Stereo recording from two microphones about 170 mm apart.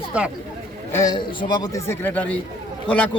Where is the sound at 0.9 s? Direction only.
20° left (ahead or behind).